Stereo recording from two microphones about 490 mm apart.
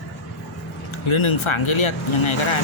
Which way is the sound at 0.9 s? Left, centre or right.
Left.